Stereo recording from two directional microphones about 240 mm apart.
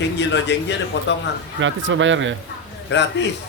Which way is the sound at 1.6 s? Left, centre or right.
Right.